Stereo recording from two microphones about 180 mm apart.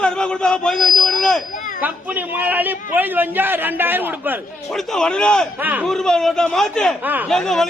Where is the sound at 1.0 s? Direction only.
5° left (ahead or behind).